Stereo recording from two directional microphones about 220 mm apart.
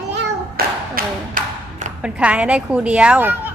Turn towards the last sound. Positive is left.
turn(degrees=-10)  # may be behind; listen again after turning